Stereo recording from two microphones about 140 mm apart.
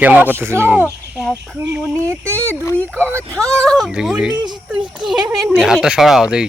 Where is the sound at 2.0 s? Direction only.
20° right (ahead or behind).